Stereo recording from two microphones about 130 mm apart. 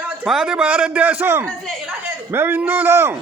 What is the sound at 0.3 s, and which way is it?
A man's voice, 5° right (ahead or behind).